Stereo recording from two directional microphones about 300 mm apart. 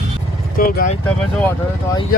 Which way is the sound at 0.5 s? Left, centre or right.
Left.